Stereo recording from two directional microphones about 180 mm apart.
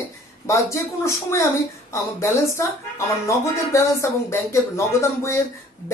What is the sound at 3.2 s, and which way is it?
A woman's voice, 15° left (ahead or behind).